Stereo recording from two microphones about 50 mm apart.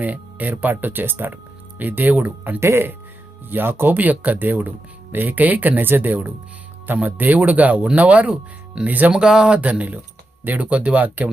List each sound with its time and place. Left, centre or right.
0.0 s speech: right
2.6 s speech: right
3.5 s speech: right
8.9 s speech: right
9.1 s speech: centre
9.6 s speech: right
10.7 s speech: right